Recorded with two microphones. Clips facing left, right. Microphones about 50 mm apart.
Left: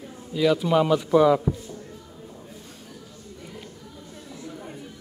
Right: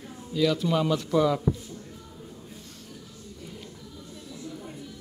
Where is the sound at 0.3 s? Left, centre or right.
Centre.